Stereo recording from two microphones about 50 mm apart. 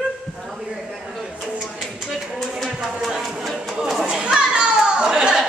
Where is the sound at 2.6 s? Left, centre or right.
Centre.